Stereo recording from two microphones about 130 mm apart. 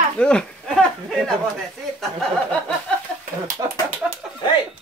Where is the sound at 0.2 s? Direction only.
5° left (ahead or behind).